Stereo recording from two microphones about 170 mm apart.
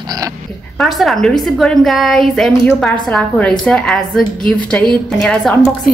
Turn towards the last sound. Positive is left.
turn(degrees=5)  # may be behind; listen again after turning